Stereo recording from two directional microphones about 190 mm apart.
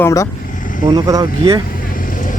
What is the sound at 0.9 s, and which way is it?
Speech, 20° right (ahead or behind).